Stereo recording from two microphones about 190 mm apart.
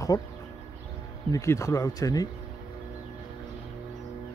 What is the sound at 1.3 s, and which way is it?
Speech, 15° left (ahead or behind).